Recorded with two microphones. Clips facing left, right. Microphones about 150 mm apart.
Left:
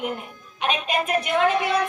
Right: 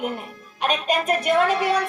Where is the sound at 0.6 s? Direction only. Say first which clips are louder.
Right 2 dB; 40° right (ahead or behind).